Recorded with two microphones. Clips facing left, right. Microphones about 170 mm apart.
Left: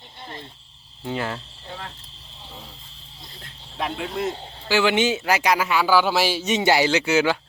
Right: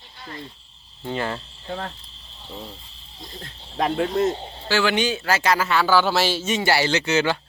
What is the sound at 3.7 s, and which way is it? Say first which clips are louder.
Speech: right 6 dB; 45° right (ahead or behind).